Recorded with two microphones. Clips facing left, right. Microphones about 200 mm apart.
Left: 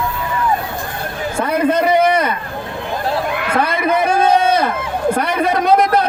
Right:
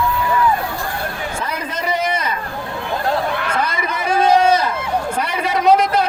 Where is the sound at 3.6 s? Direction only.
60° left (ahead or behind).